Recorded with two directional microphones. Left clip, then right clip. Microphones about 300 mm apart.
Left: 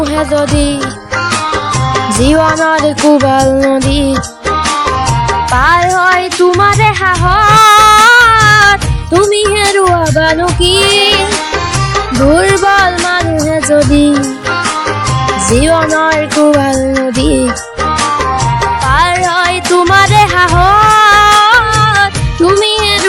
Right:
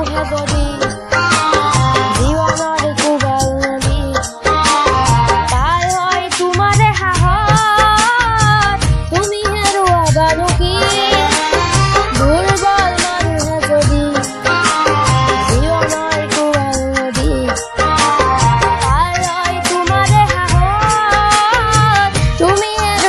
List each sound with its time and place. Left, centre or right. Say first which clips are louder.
5.6 s music: left 7 dB; left
9.2 s music: left 6 dB; centre
10.2 s music: left 3 dB; left
19.4 s music: left 6 dB; centre
19.9 s music: left 5 dB; left